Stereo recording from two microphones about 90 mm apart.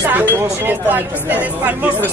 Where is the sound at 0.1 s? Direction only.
25° right (ahead or behind).